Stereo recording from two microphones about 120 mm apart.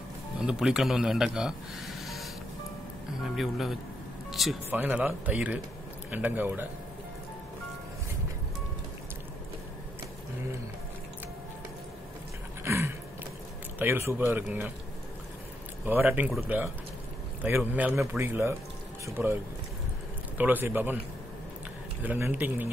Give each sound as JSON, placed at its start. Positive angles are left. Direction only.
{"t": 0.4, "sound": "speech", "side_deg": -5}
{"t": 3.3, "sound": "speech", "side_deg": 0}
{"t": 4.3, "sound": "music", "side_deg": 0}
{"t": 4.6, "sound": "speech", "side_deg": -15}
{"t": 12.6, "sound": "a sound", "side_deg": -20}
{"t": 13.7, "sound": "speech", "side_deg": -20}
{"t": 15.8, "sound": "speech", "side_deg": -15}
{"t": 20.3, "sound": "speech", "side_deg": -15}
{"t": 22.0, "sound": "speech", "side_deg": -15}